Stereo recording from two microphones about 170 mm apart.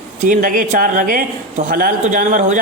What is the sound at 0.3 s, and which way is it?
A man's voice, 55° right (ahead or behind).